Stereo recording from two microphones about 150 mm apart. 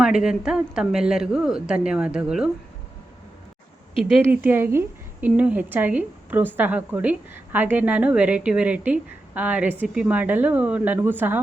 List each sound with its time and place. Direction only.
0.0 s a woman's voice: 5° right (ahead or behind)
4.2 s a woman's voice: 15° right (ahead or behind)